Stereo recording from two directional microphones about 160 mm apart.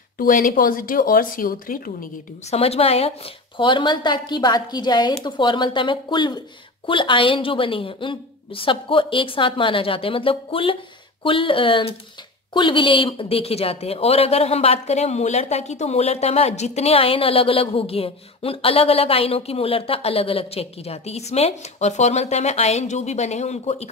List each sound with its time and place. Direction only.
0.2 s speech: 60° left (ahead or behind)
2.5 s a woman's voice: 40° left (ahead or behind)